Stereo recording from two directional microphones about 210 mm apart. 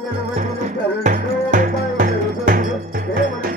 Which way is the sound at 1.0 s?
35° right (ahead or behind).